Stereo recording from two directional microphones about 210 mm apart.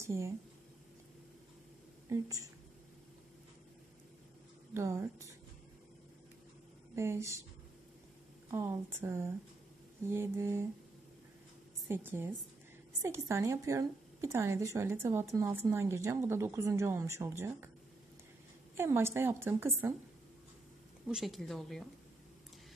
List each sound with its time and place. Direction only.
0.0 s speech: 15° right (ahead or behind)
2.0 s a woman's voice: 15° right (ahead or behind)
4.7 s a woman's voice: 15° right (ahead or behind)
7.0 s a woman's voice: 15° right (ahead or behind)
8.5 s a woman's voice: 15° right (ahead or behind)
11.9 s a woman's voice: 10° right (ahead or behind)
18.8 s a woman's voice: 10° right (ahead or behind)
21.1 s a woman's voice: centre (ahead or behind)